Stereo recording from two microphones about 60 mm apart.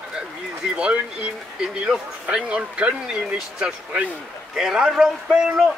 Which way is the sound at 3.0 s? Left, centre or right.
Centre.